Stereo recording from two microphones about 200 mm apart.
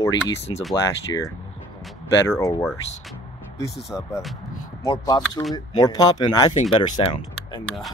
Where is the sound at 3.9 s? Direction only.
15° left (ahead or behind).